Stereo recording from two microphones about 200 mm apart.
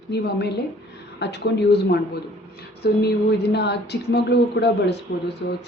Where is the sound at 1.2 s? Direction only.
55° left (ahead or behind).